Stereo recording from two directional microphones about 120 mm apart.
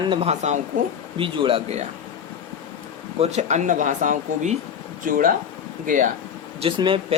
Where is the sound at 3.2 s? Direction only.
65° right (ahead or behind); by 5.2 s 90° right.